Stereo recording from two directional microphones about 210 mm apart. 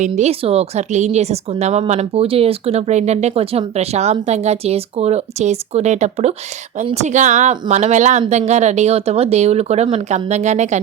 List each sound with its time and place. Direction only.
0.0 s a woman's voice: 30° right (ahead or behind)